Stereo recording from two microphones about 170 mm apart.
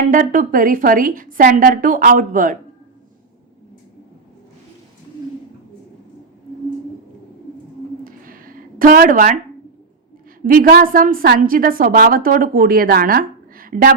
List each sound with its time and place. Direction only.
0.1 s a woman's voice: 50° right (ahead or behind)
8.0 s a sound: 55° right (ahead or behind)
10.4 s a woman's voice: 55° right (ahead or behind)